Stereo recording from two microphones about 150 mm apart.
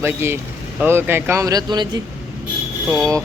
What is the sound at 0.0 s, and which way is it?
Speech, 15° right (ahead or behind).